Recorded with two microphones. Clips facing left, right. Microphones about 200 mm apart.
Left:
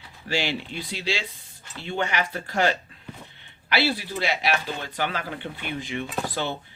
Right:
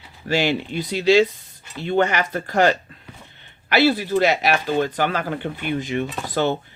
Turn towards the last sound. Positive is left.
turn(degrees=-50)  # may be behind; listen again after turning